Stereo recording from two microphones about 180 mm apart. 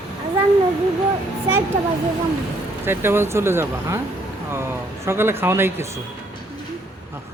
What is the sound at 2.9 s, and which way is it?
Speech, 15° right (ahead or behind).